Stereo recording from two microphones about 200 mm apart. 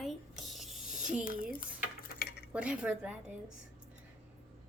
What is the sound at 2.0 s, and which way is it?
Cutlery, 45° left (ahead or behind).